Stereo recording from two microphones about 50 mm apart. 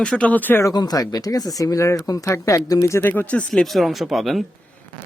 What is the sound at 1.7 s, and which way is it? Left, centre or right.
Speech, left.